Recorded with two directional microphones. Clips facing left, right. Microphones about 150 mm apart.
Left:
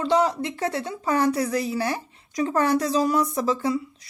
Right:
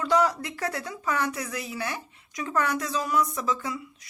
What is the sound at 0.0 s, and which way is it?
A woman's voice, 25° left (ahead or behind).